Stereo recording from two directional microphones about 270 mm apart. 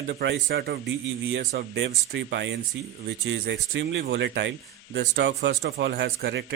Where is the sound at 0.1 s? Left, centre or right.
Right.